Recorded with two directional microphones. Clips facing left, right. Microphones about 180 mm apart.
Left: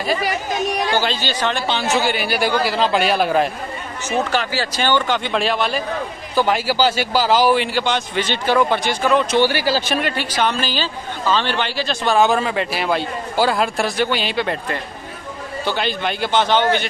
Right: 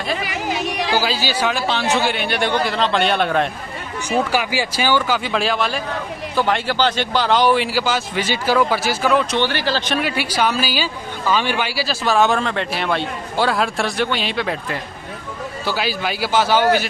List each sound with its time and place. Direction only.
0.5 s speech: 85° right
0.9 s a man's voice: 5° right (ahead or behind)
4.1 s a man's voice: 10° right (ahead or behind); by 10.0 s 5° left (ahead or behind)
10.0 s a man's voice: 10° right (ahead or behind)